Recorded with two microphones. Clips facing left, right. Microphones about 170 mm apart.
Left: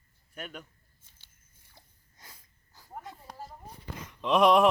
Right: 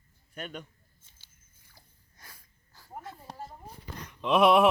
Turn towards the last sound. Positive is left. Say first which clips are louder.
# even
turn(degrees=-5)  # may be behind; listen again after turning